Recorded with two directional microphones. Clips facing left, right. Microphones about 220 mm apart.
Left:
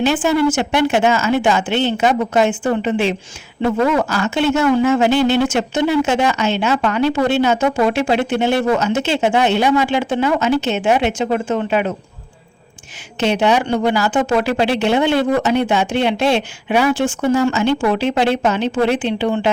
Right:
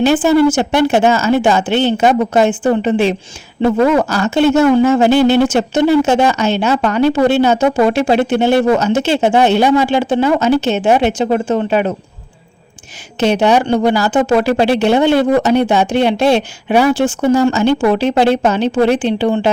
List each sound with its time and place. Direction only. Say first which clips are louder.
0.2 s speech: right 5 dB; 35° right (ahead or behind)
13.1 s speech: right 4 dB; 40° right (ahead or behind)